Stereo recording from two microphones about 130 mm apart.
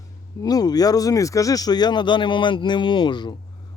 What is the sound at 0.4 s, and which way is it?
Speech, 30° left (ahead or behind).